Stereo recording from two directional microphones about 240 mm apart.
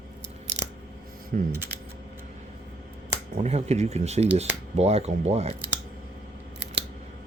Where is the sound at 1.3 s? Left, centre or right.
Right.